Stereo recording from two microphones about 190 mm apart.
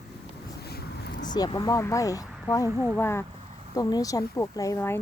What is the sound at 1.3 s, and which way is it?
Speech, 20° left (ahead or behind).